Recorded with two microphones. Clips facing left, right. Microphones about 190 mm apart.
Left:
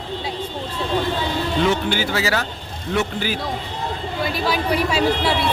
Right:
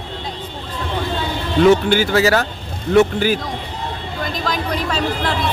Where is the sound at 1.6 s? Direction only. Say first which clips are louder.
Right 11 dB; 50° right (ahead or behind).